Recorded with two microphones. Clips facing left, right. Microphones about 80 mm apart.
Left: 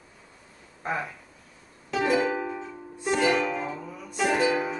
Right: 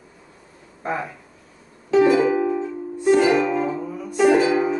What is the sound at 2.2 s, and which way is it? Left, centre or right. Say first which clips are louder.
Music: right 9 dB; centre.